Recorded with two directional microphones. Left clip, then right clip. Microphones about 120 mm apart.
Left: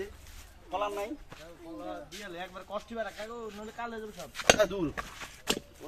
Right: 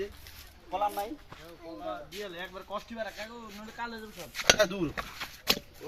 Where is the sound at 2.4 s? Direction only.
45° left (ahead or behind).